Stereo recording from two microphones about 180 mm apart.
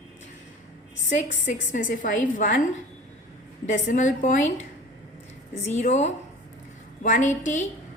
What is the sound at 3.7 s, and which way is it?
A woman's voice, 40° left (ahead or behind).